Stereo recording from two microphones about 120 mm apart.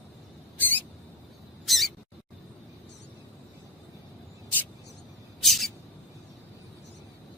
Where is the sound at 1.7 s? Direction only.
Centre (ahead or behind).